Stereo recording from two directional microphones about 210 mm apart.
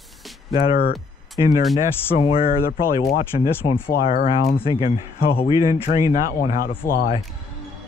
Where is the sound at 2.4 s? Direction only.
45° left (ahead or behind).